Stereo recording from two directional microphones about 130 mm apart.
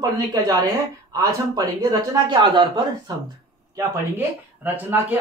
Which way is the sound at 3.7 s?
20° right (ahead or behind).